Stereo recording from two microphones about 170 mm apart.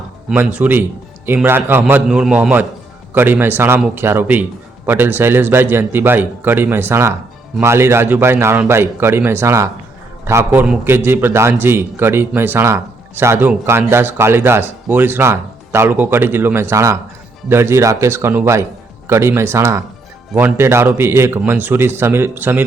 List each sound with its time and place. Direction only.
0.3 s a man's voice: 10° right (ahead or behind)